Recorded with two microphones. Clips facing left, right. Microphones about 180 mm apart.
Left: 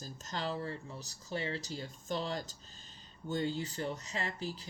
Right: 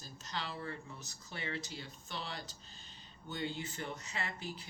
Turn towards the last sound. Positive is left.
turn(degrees=35)  # may be behind; listen again after turning